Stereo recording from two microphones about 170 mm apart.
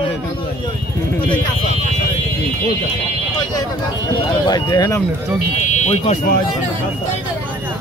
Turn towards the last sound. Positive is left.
turn(degrees=40)  # may be behind; listen again after turning